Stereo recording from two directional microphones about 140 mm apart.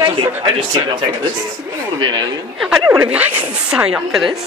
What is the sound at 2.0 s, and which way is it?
Speech, 30° right (ahead or behind).